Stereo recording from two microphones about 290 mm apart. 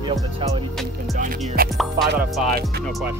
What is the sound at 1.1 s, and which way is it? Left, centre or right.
Music, right.